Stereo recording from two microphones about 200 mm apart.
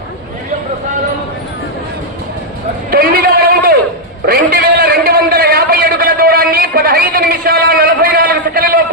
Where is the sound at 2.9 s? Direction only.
50° right (ahead or behind).